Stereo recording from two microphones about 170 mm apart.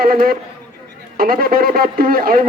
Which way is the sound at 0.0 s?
60° right (ahead or behind).